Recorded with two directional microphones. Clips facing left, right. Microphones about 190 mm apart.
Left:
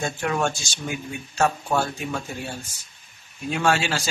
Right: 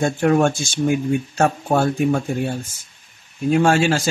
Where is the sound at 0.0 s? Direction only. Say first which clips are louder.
Right 8 dB; 50° right (ahead or behind).